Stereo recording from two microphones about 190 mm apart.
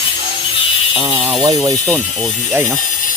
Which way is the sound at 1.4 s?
20° right (ahead or behind).